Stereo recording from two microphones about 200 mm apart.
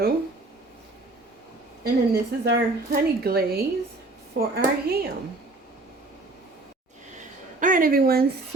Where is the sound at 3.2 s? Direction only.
50° right (ahead or behind).